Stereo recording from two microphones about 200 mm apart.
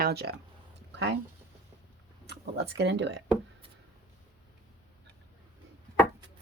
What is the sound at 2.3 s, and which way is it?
Speech, 60° right (ahead or behind).